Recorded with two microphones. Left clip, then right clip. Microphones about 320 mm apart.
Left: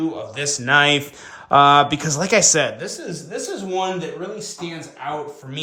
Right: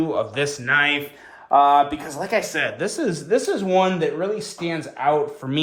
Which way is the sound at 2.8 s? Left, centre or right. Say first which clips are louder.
Right 6 dB; centre.